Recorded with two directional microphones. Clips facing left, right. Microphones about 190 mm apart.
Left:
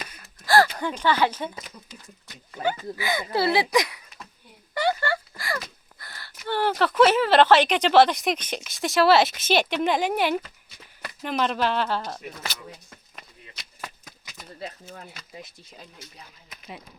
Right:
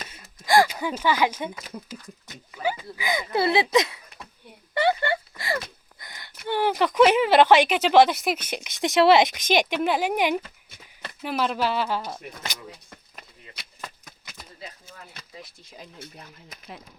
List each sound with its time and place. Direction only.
0.1 s speech: 20° right (ahead or behind)
2.6 s a woman's voice: 15° right (ahead or behind)
4.7 s a sound: 25° right (ahead or behind)
6.0 s a woman's voice: 20° right (ahead or behind)
16.0 s speech: 55° right (ahead or behind)